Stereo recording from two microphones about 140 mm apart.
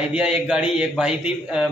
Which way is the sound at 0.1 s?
5° right (ahead or behind).